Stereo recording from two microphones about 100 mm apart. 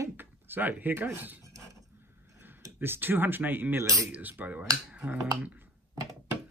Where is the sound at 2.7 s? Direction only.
20° right (ahead or behind).